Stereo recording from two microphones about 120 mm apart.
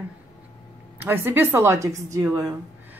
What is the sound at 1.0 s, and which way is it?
A woman's voice, 15° right (ahead or behind).